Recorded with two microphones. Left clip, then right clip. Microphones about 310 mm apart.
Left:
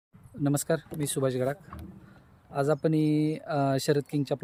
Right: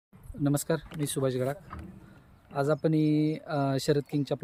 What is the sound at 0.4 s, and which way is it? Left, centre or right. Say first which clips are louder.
Speech: left 1 dB; centre.